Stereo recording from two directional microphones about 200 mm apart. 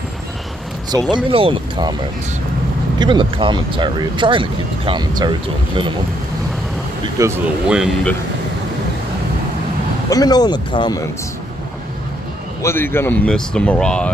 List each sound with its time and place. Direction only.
1.1 s speech: 25° right (ahead or behind)
3.0 s speech: 25° right (ahead or behind)
7.2 s speech: 15° right (ahead or behind)
7.6 s speech: 5° right (ahead or behind)
10.0 s speech: 20° left (ahead or behind)
12.6 s speech: 10° left (ahead or behind)